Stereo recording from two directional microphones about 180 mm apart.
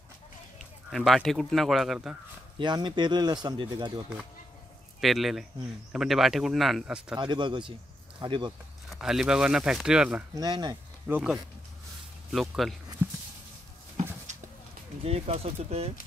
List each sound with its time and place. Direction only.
0.8 s speech: centre (ahead or behind)
2.6 s speech: 25° right (ahead or behind)
5.0 s speech: centre (ahead or behind)
7.2 s speech: 25° right (ahead or behind)
8.8 s speech: centre (ahead or behind)
10.3 s speech: 25° right (ahead or behind)
11.1 s speech: 10° right (ahead or behind)
13.0 s a sound: 15° right (ahead or behind)
14.3 s a sound: 40° right (ahead or behind)
15.0 s speech: 35° right (ahead or behind)